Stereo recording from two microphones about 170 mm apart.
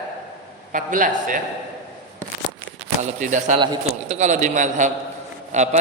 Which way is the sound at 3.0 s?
45° right (ahead or behind).